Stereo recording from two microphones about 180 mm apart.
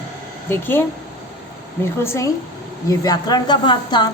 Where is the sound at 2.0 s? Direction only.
15° left (ahead or behind).